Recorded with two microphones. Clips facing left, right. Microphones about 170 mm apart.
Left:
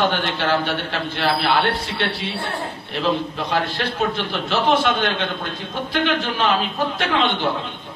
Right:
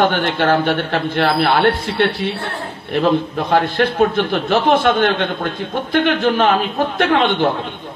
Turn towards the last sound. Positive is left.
turn(degrees=-55)  # may be behind; listen again after turning